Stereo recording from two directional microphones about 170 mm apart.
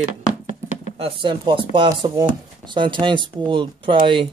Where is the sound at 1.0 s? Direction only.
30° right (ahead or behind).